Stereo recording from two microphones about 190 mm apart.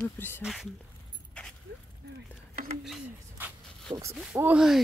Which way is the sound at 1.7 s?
55° right (ahead or behind).